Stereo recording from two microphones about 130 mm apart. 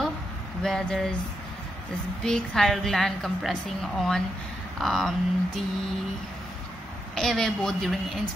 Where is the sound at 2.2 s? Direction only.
5° left (ahead or behind).